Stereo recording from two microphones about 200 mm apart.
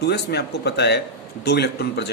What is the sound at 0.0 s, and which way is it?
A man's voice, 55° left (ahead or behind).